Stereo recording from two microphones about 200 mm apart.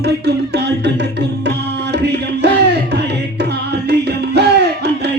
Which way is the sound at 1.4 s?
55° right (ahead or behind).